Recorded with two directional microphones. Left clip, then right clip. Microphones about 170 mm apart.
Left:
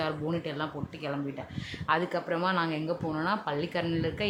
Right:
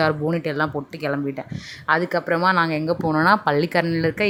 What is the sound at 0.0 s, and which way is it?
Speech, 40° right (ahead or behind).